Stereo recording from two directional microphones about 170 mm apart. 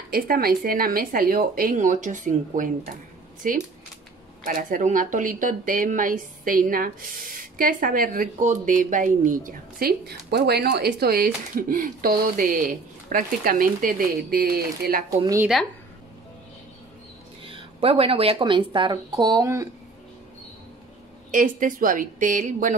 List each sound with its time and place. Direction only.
0.1 s a woman's voice: 60° right (ahead or behind)
15.0 s a woman's voice: 20° right (ahead or behind)
17.5 s a woman's voice: 30° right (ahead or behind)
21.3 s a woman's voice: 50° right (ahead or behind)